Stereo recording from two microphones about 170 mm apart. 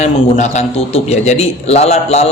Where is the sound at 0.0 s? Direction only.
45° left (ahead or behind).